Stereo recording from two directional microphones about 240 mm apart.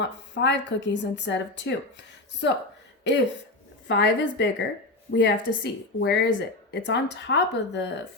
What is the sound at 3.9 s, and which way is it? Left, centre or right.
Speech, left.